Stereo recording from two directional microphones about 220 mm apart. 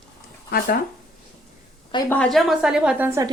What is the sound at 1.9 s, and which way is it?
Speech, 20° left (ahead or behind).